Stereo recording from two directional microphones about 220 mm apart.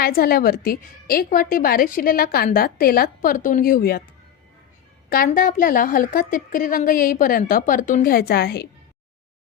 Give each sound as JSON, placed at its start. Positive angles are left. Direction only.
{"t": 0.0, "sound": "a woman's voice", "side_deg": 45}
{"t": 5.0, "sound": "a woman's voice", "side_deg": 40}